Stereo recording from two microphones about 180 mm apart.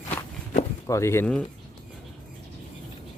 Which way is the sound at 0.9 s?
15° left (ahead or behind).